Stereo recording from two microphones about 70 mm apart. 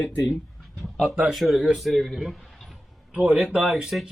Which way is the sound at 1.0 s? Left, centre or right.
Centre.